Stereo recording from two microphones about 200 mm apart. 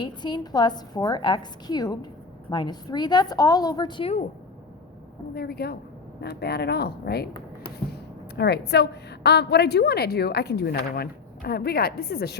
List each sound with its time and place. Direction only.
0.0 s a woman's voice: 20° left (ahead or behind)
5.3 s a woman's voice: 50° left (ahead or behind)
8.4 s a woman's voice: 55° left (ahead or behind)